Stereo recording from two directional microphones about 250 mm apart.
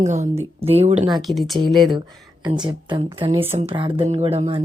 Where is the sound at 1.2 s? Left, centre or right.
Centre.